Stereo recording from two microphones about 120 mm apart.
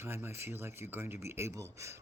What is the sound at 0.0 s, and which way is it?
Speech, 20° right (ahead or behind).